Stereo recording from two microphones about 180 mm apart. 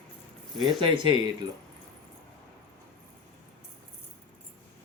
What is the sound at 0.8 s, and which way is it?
Speech, 25° right (ahead or behind).